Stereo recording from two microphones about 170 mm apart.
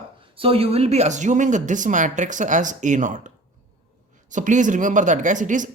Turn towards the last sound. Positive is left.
turn(degrees=-50)  # may be behind; listen again after turning